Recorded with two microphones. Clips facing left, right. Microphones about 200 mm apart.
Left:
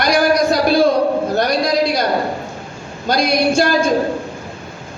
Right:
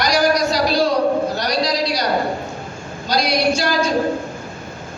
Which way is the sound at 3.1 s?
55° left (ahead or behind).